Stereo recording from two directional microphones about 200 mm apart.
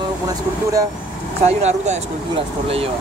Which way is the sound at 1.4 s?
35° right (ahead or behind).